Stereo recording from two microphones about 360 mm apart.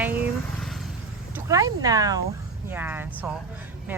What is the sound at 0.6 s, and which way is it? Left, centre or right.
Vehicle, centre.